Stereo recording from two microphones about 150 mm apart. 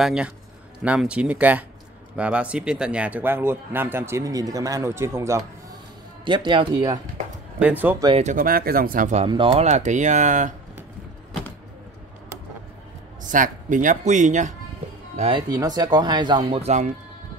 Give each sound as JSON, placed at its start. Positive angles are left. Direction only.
{"t": 0.0, "sound": "a man's voice", "side_deg": -5}
{"t": 6.2, "sound": "a man's voice", "side_deg": -30}
{"t": 7.5, "sound": "speech", "side_deg": -10}
{"t": 8.4, "sound": "speech", "side_deg": -80}
{"t": 9.3, "sound": "a man's voice", "side_deg": -35}
{"t": 9.7, "sound": "speech", "side_deg": -50}
{"t": 13.3, "sound": "speech", "side_deg": -60}
{"t": 15.1, "sound": "a man's voice", "side_deg": -40}
{"t": 15.5, "sound": "speech", "side_deg": -25}
{"t": 16.5, "sound": "speech", "side_deg": -45}